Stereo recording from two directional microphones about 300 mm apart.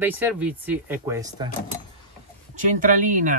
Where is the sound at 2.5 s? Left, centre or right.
Right.